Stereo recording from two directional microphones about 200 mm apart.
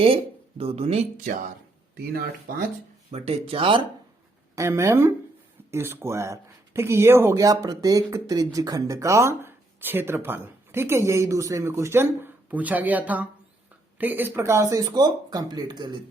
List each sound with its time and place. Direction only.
0.6 s speech: 30° right (ahead or behind)
2.5 s speech: 45° right (ahead or behind)
3.1 s speech: 30° right (ahead or behind)
4.5 s speech: 15° right (ahead or behind)